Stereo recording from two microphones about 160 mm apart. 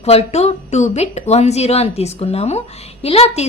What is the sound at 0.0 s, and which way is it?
A woman's voice, 40° left (ahead or behind).